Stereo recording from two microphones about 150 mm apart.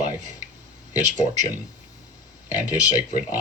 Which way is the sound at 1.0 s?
55° right (ahead or behind).